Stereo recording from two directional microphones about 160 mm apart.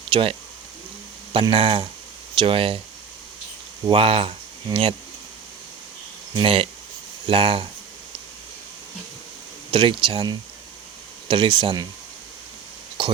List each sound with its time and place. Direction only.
0.1 s speech: 35° right (ahead or behind)
3.8 s speech: 35° right (ahead or behind)
6.3 s speech: 35° right (ahead or behind)
9.7 s speech: 30° right (ahead or behind)